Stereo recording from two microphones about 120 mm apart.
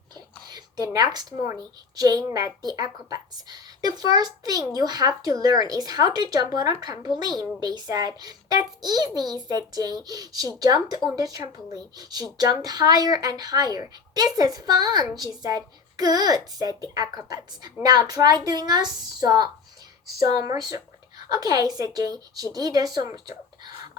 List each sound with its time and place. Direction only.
0.1 s whispering: 35° right (ahead or behind)
0.9 s speech: 35° right (ahead or behind)